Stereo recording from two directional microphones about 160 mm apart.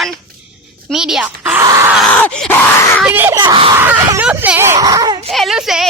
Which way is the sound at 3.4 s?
35° right (ahead or behind).